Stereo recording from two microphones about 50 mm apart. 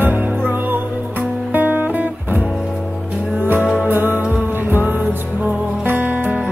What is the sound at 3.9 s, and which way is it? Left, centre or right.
Music, right.